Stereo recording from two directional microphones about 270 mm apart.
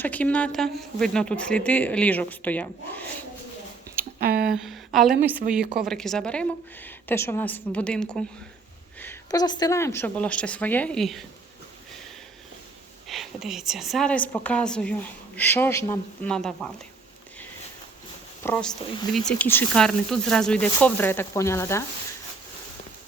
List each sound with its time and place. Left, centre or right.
0.0 s speech: centre
4.2 s speech: right
4.5 s a woman's voice: centre
13.1 s a woman's voice: centre
18.4 s speech: centre